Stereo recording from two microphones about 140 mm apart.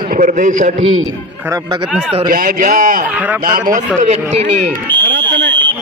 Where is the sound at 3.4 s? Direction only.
80° right.